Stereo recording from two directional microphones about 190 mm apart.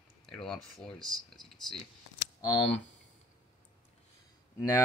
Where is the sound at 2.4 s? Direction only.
25° left (ahead or behind).